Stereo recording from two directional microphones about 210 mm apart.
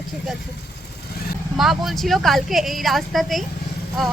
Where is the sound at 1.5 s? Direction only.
Centre (ahead or behind).